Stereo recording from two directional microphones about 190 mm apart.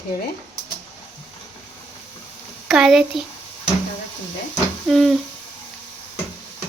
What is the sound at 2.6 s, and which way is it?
Speech, 5° right (ahead or behind).